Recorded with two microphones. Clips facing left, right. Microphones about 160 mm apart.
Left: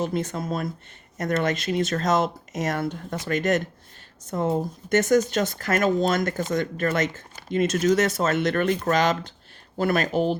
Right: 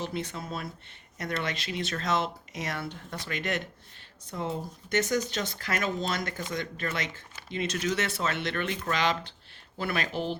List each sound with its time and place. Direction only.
0.0 s speech: 45° left (ahead or behind)